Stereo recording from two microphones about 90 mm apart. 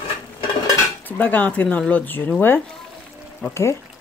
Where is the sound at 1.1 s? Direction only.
20° left (ahead or behind).